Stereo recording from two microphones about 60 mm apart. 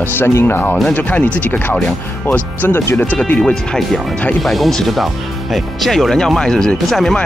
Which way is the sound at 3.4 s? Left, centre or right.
Centre.